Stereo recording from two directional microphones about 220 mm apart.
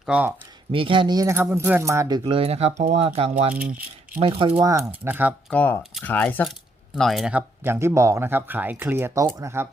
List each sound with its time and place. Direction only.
0.0 s speech: 5° right (ahead or behind)
0.7 s speech: 25° right (ahead or behind)
4.6 s speech: 15° right (ahead or behind)
5.5 s speech: 5° left (ahead or behind); by 9.6 s 10° right (ahead or behind)